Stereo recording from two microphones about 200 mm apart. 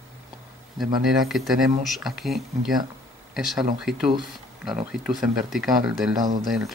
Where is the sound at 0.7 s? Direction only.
Centre (ahead or behind).